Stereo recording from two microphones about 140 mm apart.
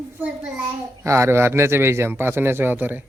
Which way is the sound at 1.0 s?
20° right (ahead or behind).